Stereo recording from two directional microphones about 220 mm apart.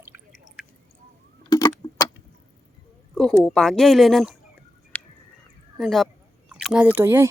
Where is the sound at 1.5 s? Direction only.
15° left (ahead or behind).